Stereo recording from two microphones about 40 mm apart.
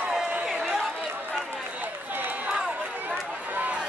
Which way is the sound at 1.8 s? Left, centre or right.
Right.